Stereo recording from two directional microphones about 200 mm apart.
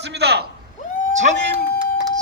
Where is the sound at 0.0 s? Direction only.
55° right (ahead or behind).